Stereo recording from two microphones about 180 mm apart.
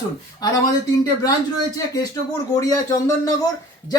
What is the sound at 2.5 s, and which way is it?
Speech, 20° left (ahead or behind).